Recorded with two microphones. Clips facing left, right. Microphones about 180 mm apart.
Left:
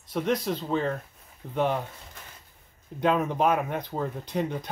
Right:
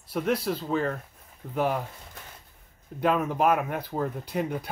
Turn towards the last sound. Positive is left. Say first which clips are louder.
# even
turn(degrees=-5)  # may be behind; listen again after turning